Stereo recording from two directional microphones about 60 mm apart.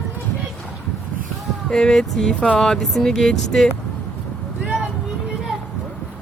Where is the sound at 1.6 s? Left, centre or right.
Centre.